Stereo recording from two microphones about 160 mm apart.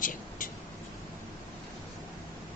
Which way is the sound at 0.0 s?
55° left (ahead or behind).